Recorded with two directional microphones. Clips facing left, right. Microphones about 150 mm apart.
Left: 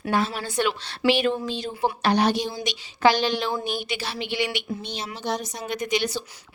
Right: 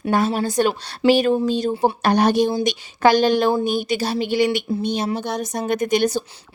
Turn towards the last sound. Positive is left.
turn(degrees=-45)  # may be behind; listen again after turning